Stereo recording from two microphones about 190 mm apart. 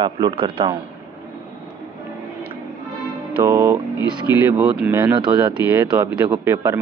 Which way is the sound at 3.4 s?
15° right (ahead or behind).